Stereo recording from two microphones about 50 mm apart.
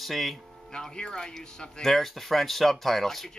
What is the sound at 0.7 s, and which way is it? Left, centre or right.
Speech, centre.